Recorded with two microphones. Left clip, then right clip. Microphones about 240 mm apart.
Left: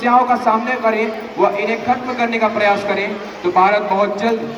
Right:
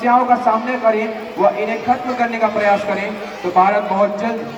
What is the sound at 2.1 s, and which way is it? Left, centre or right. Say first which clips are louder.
A man's voice: left 1 dB; left.